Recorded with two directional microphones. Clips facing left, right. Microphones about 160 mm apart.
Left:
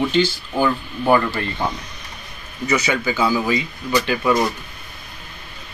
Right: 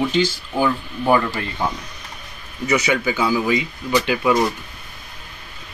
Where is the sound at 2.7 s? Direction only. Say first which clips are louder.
Right 1 dB; 15° right (ahead or behind).